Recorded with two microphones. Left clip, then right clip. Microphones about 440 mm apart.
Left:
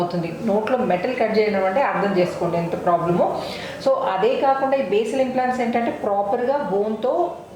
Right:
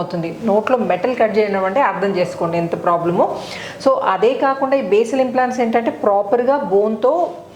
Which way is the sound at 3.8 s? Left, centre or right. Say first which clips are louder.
Right 4 dB; right.